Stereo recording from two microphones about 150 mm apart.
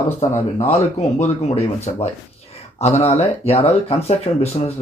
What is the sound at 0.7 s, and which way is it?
Speech, 50° left (ahead or behind).